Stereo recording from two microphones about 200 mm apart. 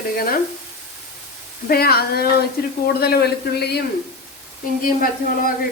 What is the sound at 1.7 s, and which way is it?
Speech, 50° left (ahead or behind).